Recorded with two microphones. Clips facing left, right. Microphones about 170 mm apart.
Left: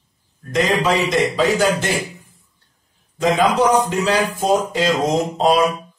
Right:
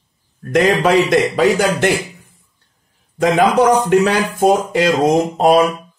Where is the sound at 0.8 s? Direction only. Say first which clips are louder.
Right 5 dB; 60° right (ahead or behind).